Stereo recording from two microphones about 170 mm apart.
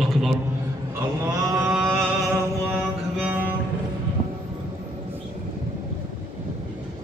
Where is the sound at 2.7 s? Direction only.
5° right (ahead or behind).